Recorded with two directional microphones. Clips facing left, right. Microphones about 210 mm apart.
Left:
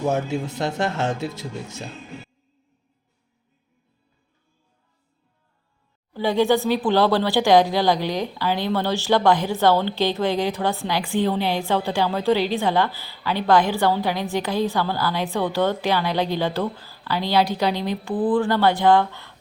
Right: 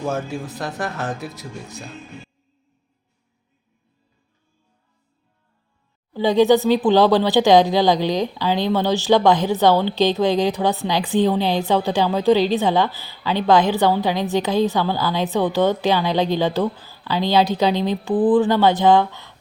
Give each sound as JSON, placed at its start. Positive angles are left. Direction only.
{"t": 0.0, "sound": "speech", "side_deg": 20}
{"t": 6.1, "sound": "speech", "side_deg": -20}